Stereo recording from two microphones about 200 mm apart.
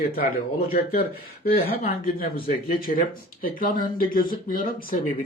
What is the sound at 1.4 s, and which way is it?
A man's voice, 50° left (ahead or behind).